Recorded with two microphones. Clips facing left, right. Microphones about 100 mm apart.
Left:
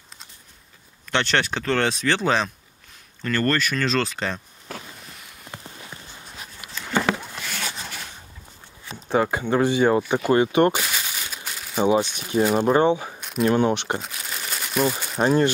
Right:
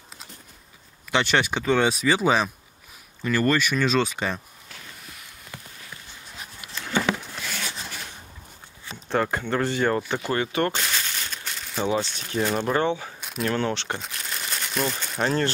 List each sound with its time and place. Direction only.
1.1 s speech: 5° right (ahead or behind)
5.5 s a sound: 25° left (ahead or behind)
9.1 s speech: 10° left (ahead or behind)
10.8 s a sound: 10° left (ahead or behind)
11.8 s speech: 15° left (ahead or behind)
13.2 s single-lens reflex camera: centre (ahead or behind)
13.6 s speech: 15° left (ahead or behind)
13.9 s crumpling: 5° left (ahead or behind)
15.1 s speech: 15° left (ahead or behind)